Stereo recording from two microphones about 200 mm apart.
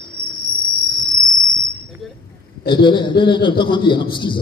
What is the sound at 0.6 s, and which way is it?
Cricket, 25° left (ahead or behind).